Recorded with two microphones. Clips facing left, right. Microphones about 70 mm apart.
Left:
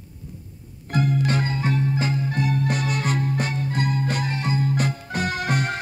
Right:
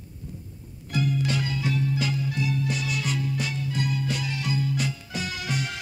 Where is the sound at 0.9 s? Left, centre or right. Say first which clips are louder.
Left 4 dB; left.